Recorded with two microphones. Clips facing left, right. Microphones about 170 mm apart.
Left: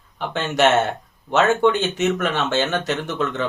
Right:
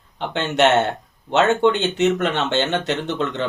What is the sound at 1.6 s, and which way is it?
Speech, 20° right (ahead or behind).